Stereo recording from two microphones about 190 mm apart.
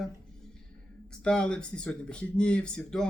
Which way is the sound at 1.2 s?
5° left (ahead or behind).